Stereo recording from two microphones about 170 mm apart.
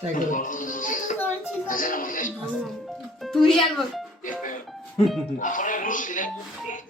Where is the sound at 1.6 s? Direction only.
55° left (ahead or behind).